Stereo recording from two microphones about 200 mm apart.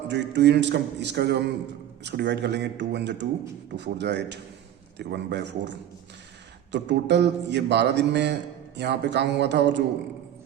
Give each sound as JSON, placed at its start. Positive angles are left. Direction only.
{"t": 0.1, "sound": "a man's voice", "side_deg": -60}